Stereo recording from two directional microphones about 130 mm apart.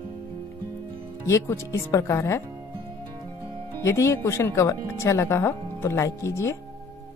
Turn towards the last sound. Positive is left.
turn(degrees=20)  # may be behind; listen again after turning